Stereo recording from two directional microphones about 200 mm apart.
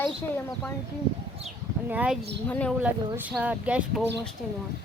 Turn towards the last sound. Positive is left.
turn(degrees=-5)  # may be behind; listen again after turning